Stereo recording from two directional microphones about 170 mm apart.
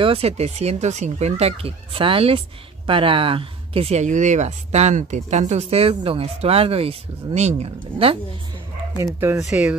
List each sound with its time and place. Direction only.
0.0 s speech: 35° right (ahead or behind)
8.9 s speech: 15° right (ahead or behind)
9.4 s speech: 5° right (ahead or behind)